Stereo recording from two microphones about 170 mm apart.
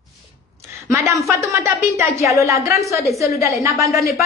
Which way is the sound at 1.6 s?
15° right (ahead or behind).